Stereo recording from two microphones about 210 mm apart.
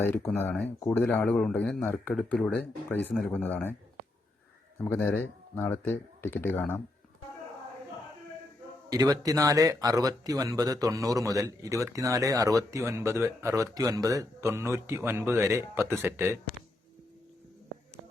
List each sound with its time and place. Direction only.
0.0 s speech: 10° left (ahead or behind)
4.8 s speech: 10° left (ahead or behind)
8.9 s speech: 15° right (ahead or behind)